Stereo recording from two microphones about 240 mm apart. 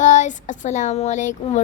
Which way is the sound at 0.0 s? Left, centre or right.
Left.